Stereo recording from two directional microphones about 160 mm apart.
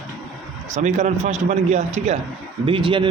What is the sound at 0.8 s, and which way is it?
Speech, 50° right (ahead or behind).